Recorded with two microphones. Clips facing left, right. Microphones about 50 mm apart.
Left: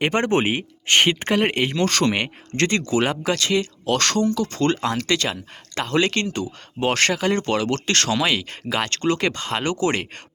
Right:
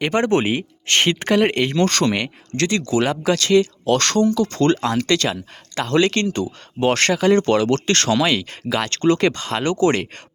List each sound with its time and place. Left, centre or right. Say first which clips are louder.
0.1 s speech: right 2 dB; left
1.7 s speech: right 2 dB; centre
2.1 s speech: even; left